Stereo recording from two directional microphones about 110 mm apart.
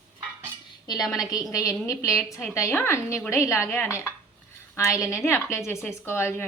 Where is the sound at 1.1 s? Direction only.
Centre (ahead or behind).